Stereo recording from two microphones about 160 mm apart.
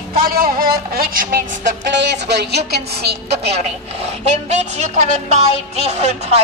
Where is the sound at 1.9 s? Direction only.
90° right.